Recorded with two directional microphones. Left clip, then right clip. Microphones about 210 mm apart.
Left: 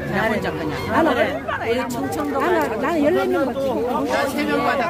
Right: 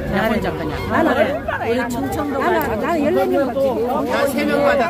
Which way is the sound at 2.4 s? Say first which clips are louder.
Right 2 dB; 20° left (ahead or behind).